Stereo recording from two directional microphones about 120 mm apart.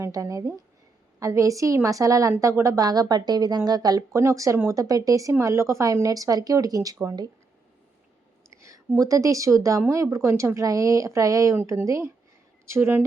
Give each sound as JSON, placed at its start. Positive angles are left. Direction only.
{"t": 0.0, "sound": "speech", "side_deg": -25}
{"t": 8.4, "sound": "a sound", "side_deg": -25}
{"t": 9.0, "sound": "speech", "side_deg": -30}